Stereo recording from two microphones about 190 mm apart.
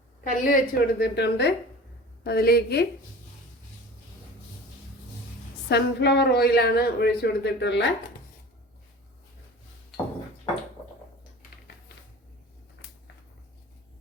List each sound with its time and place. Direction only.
0.3 s speech: 45° left (ahead or behind)
5.6 s speech: 60° left (ahead or behind)